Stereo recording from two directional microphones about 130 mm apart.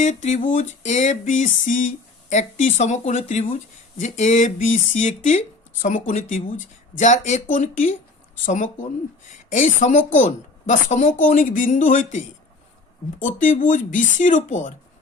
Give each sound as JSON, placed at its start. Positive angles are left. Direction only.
{"t": 0.0, "sound": "speech", "side_deg": 70}
{"t": 2.3, "sound": "speech", "side_deg": 65}